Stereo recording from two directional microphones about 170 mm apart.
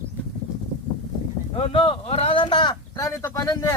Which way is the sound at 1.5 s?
30° left (ahead or behind).